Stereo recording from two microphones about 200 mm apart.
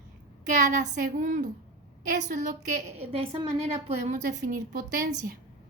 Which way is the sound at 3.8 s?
35° right (ahead or behind).